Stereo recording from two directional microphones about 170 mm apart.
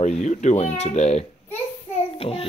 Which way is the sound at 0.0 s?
45° left (ahead or behind).